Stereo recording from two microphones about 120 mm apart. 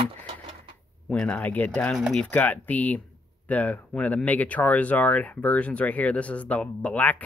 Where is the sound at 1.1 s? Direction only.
10° left (ahead or behind).